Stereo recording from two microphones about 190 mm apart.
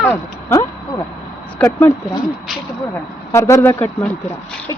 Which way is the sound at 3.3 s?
15° left (ahead or behind).